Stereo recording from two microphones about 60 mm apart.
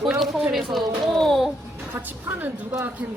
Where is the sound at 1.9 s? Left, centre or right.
Right.